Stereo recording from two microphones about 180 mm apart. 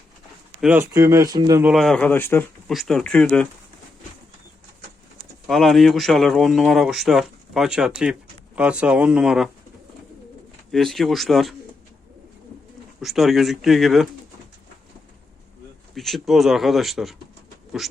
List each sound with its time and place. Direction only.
0.6 s speech: 10° right (ahead or behind)
1.6 s speech: centre (ahead or behind)
5.5 s speech: centre (ahead or behind)
10.7 s speech: centre (ahead or behind)
13.0 s speech: centre (ahead or behind)
16.0 s speech: centre (ahead or behind)